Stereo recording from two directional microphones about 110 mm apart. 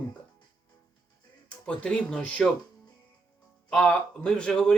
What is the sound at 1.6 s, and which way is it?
Speech, 10° left (ahead or behind).